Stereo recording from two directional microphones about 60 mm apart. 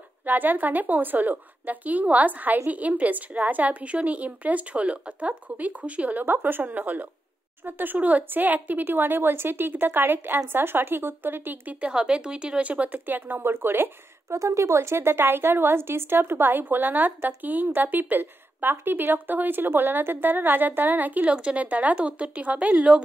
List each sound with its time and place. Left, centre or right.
0.2 s a woman's voice: right
6.2 s a woman's voice: right
11.8 s a woman's voice: centre; by 13.8 s right
14.3 s a woman's voice: right; by 23.0 s centre